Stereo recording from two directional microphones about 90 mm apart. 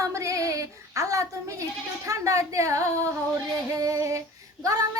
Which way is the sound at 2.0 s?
35° right (ahead or behind).